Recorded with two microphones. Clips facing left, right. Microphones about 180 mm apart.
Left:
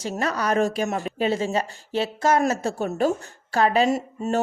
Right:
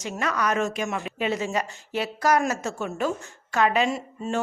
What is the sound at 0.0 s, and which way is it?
Speech, 35° left (ahead or behind).